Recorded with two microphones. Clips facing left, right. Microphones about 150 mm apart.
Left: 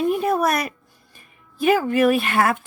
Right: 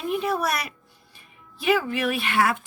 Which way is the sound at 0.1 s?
45° left (ahead or behind).